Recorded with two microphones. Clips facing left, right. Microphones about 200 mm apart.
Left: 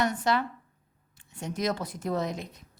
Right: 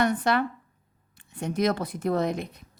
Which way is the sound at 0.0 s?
55° right (ahead or behind).